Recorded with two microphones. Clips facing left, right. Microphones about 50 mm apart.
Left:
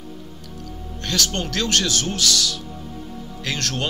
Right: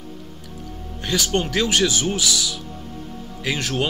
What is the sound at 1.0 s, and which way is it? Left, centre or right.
Speech, centre.